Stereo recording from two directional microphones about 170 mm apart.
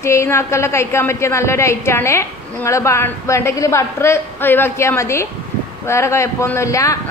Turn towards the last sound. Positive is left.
turn(degrees=20)  # may be behind; listen again after turning